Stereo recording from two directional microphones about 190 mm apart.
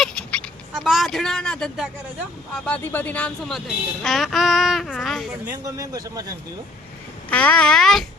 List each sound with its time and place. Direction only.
0.0 s a sound: 5° left (ahead or behind)
0.9 s speech: centre (ahead or behind)
5.6 s speech: 20° right (ahead or behind)
7.3 s speech: 5° left (ahead or behind)